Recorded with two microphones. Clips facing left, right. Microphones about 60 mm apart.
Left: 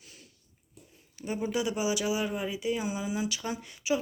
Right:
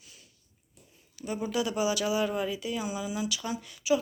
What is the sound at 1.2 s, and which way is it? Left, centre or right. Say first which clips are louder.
Speech: even; left.